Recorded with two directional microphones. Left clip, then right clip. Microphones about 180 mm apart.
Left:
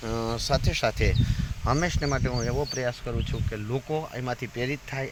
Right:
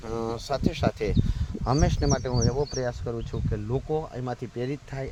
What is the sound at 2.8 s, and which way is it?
Speech, 25° right (ahead or behind).